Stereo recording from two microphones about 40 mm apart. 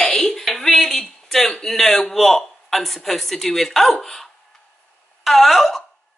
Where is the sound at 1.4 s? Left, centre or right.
Centre.